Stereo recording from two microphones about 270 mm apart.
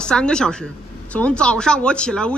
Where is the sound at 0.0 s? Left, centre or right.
Centre.